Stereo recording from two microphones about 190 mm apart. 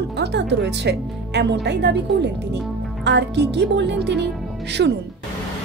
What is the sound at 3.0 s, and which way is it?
A woman's voice, 65° right (ahead or behind).